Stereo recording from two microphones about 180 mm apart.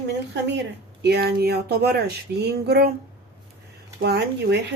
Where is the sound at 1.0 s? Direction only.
60° right (ahead or behind).